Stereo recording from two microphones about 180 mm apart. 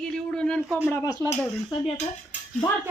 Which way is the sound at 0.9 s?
10° left (ahead or behind).